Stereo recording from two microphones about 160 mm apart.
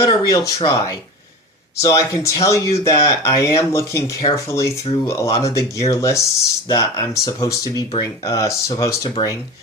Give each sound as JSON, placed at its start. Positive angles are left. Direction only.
{"t": 0.0, "sound": "speech", "side_deg": 20}